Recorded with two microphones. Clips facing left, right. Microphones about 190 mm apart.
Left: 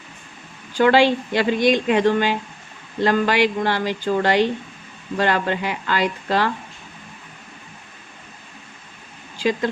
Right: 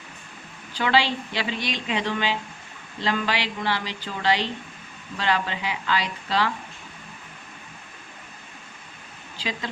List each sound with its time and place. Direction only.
0.7 s speech: 50° left (ahead or behind)
9.4 s speech: 50° left (ahead or behind)